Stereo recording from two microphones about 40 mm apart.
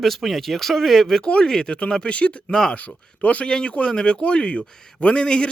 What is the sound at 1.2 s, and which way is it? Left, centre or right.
Speech, left.